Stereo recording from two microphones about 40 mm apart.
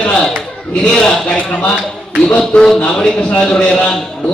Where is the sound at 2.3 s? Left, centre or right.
Left.